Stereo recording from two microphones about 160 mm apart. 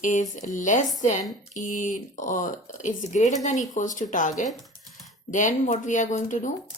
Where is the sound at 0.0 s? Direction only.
50° left (ahead or behind).